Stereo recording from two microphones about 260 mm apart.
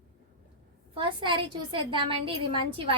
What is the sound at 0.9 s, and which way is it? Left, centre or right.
A woman's voice, centre.